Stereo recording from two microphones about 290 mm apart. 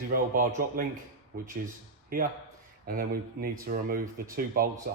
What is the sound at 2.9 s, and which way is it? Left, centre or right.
Speech, right.